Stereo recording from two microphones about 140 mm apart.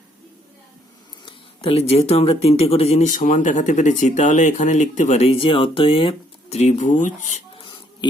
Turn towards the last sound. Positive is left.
turn(degrees=60)  # may be behind; listen again after turning